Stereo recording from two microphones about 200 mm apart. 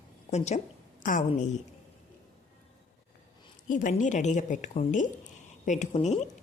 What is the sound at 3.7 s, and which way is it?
Speech, 40° left (ahead or behind).